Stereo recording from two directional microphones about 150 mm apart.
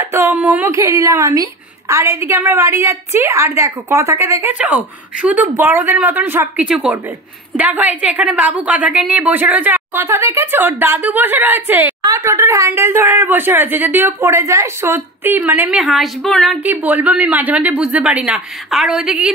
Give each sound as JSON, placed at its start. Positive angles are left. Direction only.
{"t": 0.0, "sound": "a woman's voice", "side_deg": -15}
{"t": 15.8, "sound": "a woman's voice", "side_deg": 0}
{"t": 16.6, "sound": "a woman's voice", "side_deg": -10}